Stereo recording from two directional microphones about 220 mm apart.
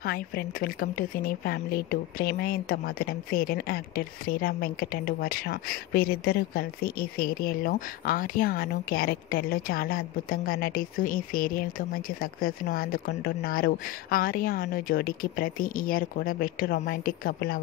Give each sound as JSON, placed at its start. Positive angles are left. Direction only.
{"t": 0.0, "sound": "speech", "side_deg": 45}